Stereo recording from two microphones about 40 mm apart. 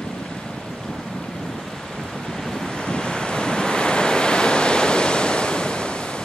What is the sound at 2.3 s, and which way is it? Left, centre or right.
Waves, centre.